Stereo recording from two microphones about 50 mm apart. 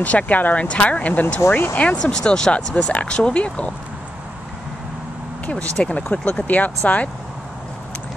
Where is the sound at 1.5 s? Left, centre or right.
Left.